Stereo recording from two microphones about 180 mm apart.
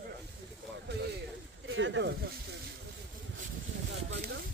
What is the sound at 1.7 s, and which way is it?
Speech, 90° right.